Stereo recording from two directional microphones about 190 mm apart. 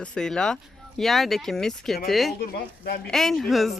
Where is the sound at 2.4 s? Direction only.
55° left (ahead or behind).